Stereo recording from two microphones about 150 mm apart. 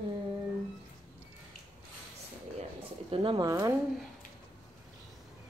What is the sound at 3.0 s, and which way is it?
Speech, 35° right (ahead or behind).